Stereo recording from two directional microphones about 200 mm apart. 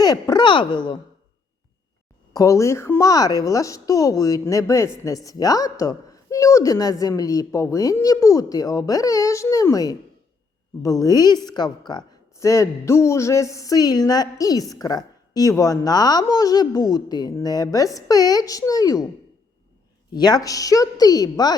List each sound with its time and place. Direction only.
0.0 s speech: 20° left (ahead or behind)
2.3 s a woman's voice: 15° left (ahead or behind)
20.1 s speech: 20° left (ahead or behind)